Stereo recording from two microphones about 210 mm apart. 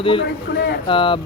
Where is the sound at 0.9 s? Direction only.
25° left (ahead or behind).